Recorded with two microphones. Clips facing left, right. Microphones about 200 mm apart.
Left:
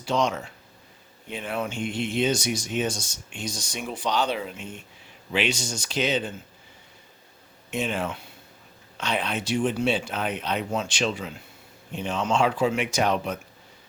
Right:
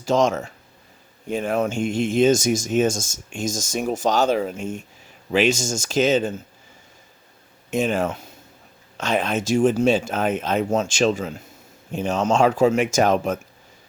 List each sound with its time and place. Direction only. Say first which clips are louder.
0.0 s speech: right 6 dB; 45° right (ahead or behind)
7.7 s speech: right 6 dB; 45° right (ahead or behind)